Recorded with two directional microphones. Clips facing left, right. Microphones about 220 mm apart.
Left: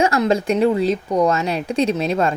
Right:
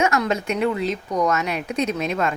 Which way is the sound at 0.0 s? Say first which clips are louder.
Left 4 dB; 30° left (ahead or behind).